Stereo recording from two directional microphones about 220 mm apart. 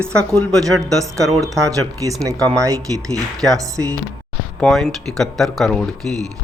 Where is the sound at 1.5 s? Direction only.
15° right (ahead or behind).